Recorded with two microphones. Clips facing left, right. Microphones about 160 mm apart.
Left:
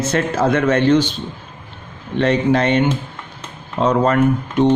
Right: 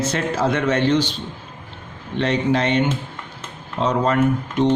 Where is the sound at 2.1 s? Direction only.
50° left (ahead or behind).